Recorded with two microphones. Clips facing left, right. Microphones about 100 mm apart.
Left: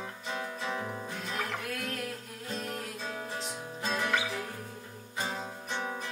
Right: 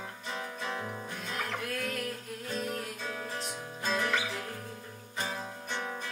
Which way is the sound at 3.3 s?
Centre (ahead or behind).